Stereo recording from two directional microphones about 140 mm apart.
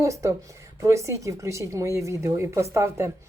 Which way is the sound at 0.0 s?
20° right (ahead or behind).